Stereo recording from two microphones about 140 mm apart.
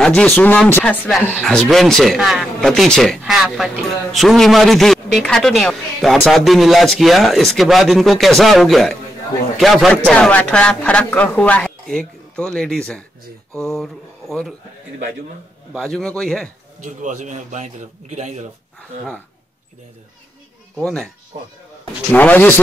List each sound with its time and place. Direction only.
0.0 s a man's voice: 5° left (ahead or behind)
15.7 s speech: 5° left (ahead or behind)
16.8 s a man's voice: 60° right (ahead or behind)
20.7 s speech: 5° left (ahead or behind)
22.1 s a man's voice: 10° left (ahead or behind)